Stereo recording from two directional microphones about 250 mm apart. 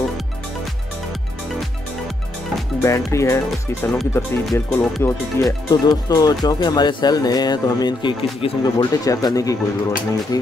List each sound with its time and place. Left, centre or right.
3.1 s speech: centre